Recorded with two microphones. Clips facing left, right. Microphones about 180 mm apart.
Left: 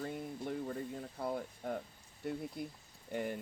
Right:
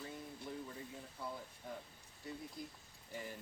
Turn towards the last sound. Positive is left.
turn(degrees=65)  # may be behind; listen again after turning